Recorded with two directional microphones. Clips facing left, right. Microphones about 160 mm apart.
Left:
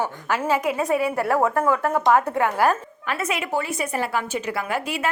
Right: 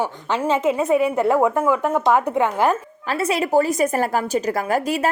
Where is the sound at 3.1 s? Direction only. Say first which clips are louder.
Right 6 dB; 35° right (ahead or behind).